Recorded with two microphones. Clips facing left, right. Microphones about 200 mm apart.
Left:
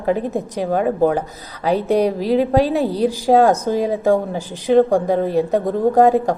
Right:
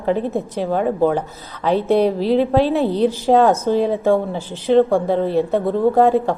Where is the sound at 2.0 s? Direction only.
10° left (ahead or behind).